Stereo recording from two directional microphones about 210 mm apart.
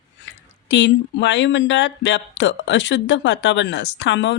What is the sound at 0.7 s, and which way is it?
Speech, 60° left (ahead or behind).